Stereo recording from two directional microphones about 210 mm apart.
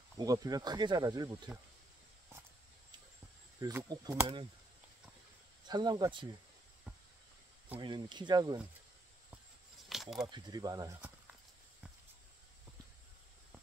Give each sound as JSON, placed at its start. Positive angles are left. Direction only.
{"t": 0.2, "sound": "speech", "side_deg": -15}
{"t": 3.6, "sound": "speech", "side_deg": -20}
{"t": 5.7, "sound": "speech", "side_deg": -20}
{"t": 7.8, "sound": "speech", "side_deg": -20}
{"t": 9.8, "sound": "a sound", "side_deg": 0}
{"t": 10.2, "sound": "speech", "side_deg": -20}